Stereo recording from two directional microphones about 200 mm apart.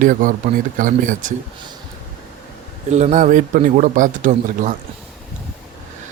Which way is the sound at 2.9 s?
35° right (ahead or behind).